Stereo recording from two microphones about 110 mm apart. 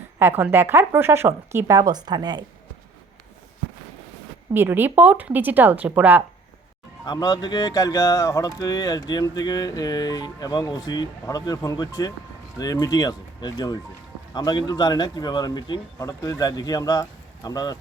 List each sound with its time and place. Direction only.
0.2 s a woman's voice: 20° right (ahead or behind); by 2.4 s 40° right (ahead or behind)
4.5 s speech: 20° right (ahead or behind)
7.0 s speech: 40° left (ahead or behind)
16.0 s speech: 30° left (ahead or behind)